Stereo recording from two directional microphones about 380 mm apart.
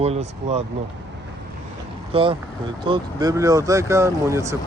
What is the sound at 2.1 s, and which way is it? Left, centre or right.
Speech, centre.